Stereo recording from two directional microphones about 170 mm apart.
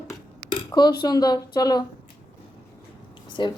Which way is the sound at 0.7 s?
25° left (ahead or behind).